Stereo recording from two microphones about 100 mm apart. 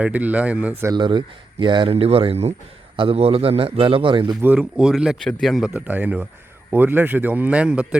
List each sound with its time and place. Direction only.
0.0 s a man's voice: 15° right (ahead or behind)
0.9 s speech: 55° right (ahead or behind)
4.4 s speech: 20° right (ahead or behind)
4.8 s a man's voice: 5° right (ahead or behind)